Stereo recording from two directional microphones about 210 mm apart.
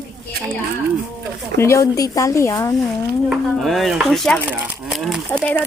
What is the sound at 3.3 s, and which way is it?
Speech, centre (ahead or behind).